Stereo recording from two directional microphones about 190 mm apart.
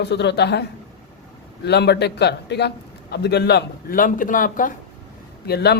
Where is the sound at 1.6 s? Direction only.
60° left (ahead or behind); by 4.7 s 45° left (ahead or behind).